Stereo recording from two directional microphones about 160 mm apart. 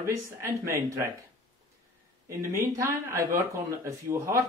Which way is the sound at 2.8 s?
15° right (ahead or behind).